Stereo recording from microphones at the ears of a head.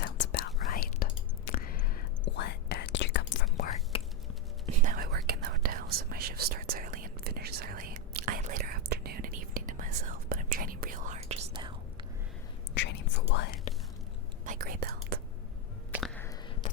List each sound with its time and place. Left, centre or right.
0.0 s whispering: left
4.6 s whispering: right
12.7 s whispering: left
14.4 s whispering: right